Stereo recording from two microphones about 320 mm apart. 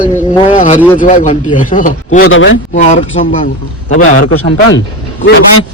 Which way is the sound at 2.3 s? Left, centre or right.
Left.